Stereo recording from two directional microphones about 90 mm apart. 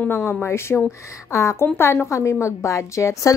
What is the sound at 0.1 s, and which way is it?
Speech, 25° left (ahead or behind).